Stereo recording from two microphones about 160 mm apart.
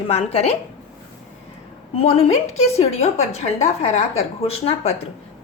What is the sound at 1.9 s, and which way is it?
A woman's voice, 40° left (ahead or behind).